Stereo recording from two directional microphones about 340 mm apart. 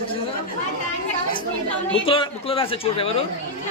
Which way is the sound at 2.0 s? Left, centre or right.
Centre.